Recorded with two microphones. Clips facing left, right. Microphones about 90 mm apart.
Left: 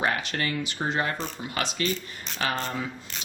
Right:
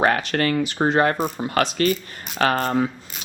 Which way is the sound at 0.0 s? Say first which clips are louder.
Right 8 dB; 55° right (ahead or behind).